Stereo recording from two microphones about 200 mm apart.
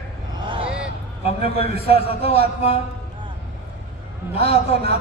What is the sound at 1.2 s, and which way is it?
A man's voice, 30° left (ahead or behind).